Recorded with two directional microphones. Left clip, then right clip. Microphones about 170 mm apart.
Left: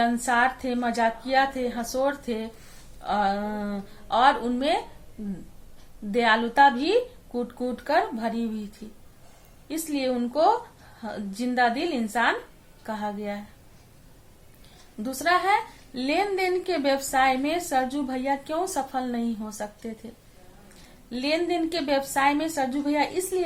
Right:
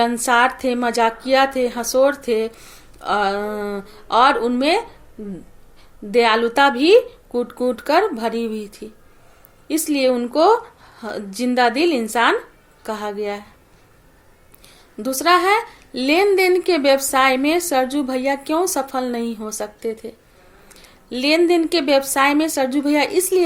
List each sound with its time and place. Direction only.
0.0 s a woman's voice: 30° right (ahead or behind)
6.1 s a woman's voice: 30° right (ahead or behind)
9.6 s a woman's voice: 30° right (ahead or behind)
15.0 s a woman's voice: 30° right (ahead or behind)
21.1 s a woman's voice: 35° right (ahead or behind)